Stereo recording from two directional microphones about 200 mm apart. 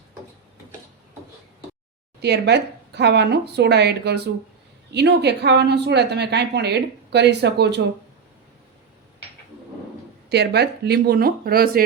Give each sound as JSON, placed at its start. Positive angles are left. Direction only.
{"t": 2.2, "sound": "speech", "side_deg": -55}
{"t": 10.2, "sound": "speech", "side_deg": -55}